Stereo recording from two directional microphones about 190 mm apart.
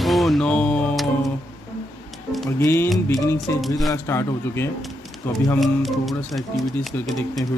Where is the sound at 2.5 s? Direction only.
15° left (ahead or behind).